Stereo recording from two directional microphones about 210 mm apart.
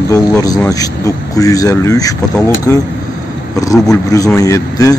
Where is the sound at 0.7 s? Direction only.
15° left (ahead or behind).